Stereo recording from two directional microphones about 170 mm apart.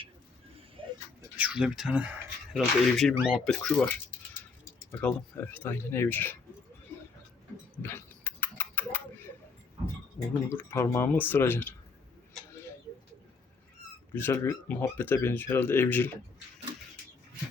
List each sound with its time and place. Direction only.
0.8 s tick-tock: 30° right (ahead or behind)
1.4 s speech: 5° right (ahead or behind); by 6.3 s 10° left (ahead or behind)
7.8 s a sound: 15° left (ahead or behind)
10.5 s speech: 10° left (ahead or behind)
14.2 s speech: 15° left (ahead or behind)